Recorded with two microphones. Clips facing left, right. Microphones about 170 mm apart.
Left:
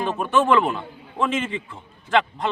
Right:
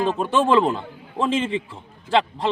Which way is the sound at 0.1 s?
30° right (ahead or behind).